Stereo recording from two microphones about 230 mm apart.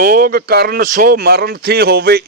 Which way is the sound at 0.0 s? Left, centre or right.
Right.